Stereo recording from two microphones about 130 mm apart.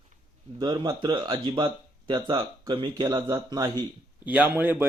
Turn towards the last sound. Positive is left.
turn(degrees=-15)  # may be behind; listen again after turning